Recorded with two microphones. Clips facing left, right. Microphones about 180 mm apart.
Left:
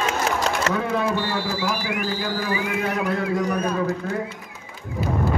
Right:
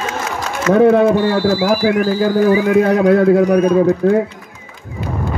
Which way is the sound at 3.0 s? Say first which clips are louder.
Right 13 dB; 60° right (ahead or behind).